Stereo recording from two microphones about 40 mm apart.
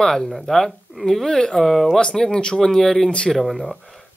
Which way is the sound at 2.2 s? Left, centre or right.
Centre.